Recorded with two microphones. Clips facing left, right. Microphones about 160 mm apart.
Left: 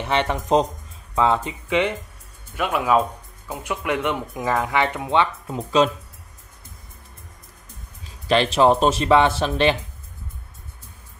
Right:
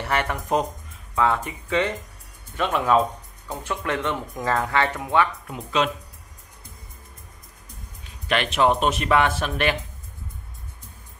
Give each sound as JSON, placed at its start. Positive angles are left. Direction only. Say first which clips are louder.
{"t": 0.0, "sound": "speech", "louder": "left 3 dB", "side_deg": 20}
{"t": 5.6, "sound": "speech", "louder": "left 5 dB", "side_deg": 35}
{"t": 8.3, "sound": "speech", "louder": "left 4 dB", "side_deg": 30}